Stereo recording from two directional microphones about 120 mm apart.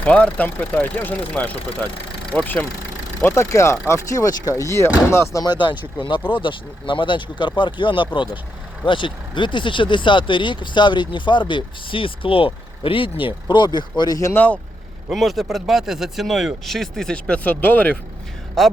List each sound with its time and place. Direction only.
0.0 s speech: 10° left (ahead or behind)
5.4 s speech: 40° left (ahead or behind)
14.3 s speech: 10° left (ahead or behind)
15.1 s speech: centre (ahead or behind)
18.6 s speech: centre (ahead or behind)